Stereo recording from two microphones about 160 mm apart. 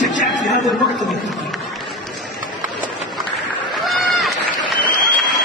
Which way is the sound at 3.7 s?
Centre (ahead or behind).